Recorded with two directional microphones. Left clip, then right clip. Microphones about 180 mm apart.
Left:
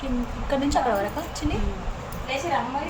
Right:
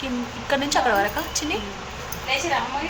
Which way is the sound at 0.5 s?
10° right (ahead or behind).